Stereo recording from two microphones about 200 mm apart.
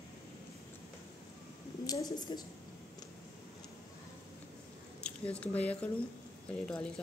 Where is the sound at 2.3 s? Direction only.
25° left (ahead or behind).